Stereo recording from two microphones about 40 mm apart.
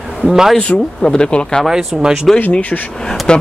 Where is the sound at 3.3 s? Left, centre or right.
Left.